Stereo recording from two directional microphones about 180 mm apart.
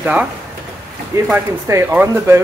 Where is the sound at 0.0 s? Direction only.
5° right (ahead or behind).